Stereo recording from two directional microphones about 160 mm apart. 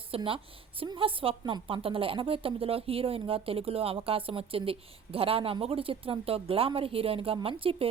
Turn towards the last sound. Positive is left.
turn(degrees=-35)  # may be behind; listen again after turning